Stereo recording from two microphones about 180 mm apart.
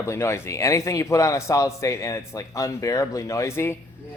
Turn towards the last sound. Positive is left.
turn(degrees=15)  # may be behind; listen again after turning